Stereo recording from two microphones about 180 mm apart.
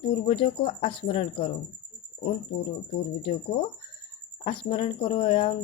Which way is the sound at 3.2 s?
30° left (ahead or behind).